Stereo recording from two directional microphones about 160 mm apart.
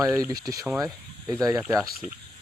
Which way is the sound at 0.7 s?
5° right (ahead or behind).